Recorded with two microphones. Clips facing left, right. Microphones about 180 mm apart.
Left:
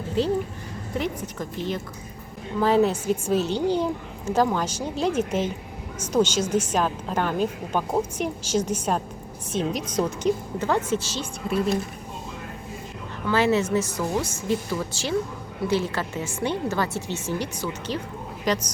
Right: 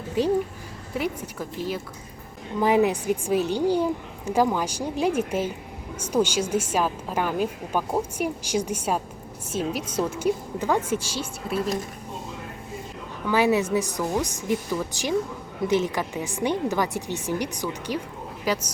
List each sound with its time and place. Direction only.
0.2 s a woman's voice: 15° right (ahead or behind)
13.2 s a woman's voice: 15° right (ahead or behind)